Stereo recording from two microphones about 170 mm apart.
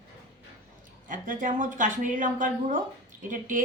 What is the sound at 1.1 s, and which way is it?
A woman's voice, 50° right (ahead or behind).